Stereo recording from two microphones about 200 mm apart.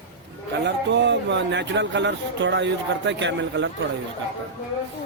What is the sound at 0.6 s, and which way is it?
Speech, 60° right (ahead or behind).